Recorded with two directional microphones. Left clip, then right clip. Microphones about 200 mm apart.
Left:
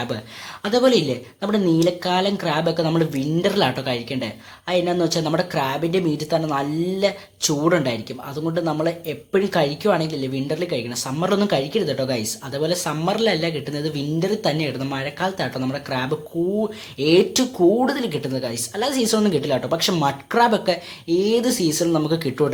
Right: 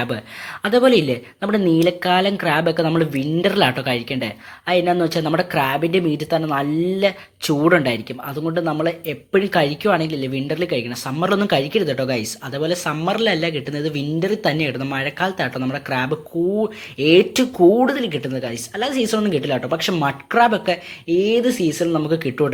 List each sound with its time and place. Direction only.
0.6 s speech: 15° right (ahead or behind)